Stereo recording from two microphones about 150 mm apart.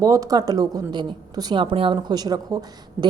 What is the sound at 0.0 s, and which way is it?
A woman's voice, 25° right (ahead or behind).